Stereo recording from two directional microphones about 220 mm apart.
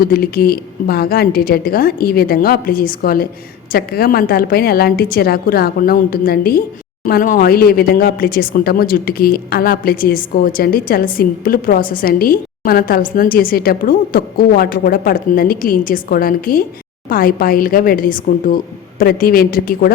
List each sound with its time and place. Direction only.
0.0 s a woman's voice: 40° left (ahead or behind)